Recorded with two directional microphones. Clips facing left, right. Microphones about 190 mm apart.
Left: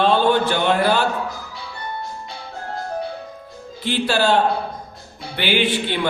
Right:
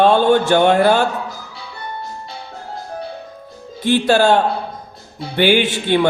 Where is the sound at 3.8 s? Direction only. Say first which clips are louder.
Right 6 dB; 45° right (ahead or behind).